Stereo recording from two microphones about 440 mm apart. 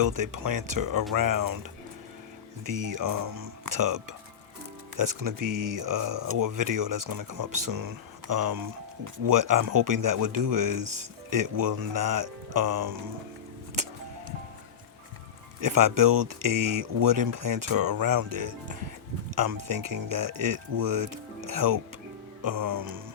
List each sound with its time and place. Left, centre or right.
0.0 s speech: right
2.6 s speech: right
13.8 s music: right
15.6 s speech: right